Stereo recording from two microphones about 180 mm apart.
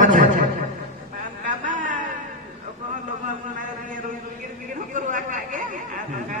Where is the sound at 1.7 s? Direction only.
45° right (ahead or behind).